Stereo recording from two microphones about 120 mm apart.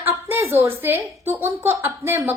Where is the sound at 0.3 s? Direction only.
20° right (ahead or behind).